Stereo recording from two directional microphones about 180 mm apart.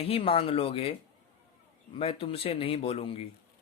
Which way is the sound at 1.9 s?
30° left (ahead or behind).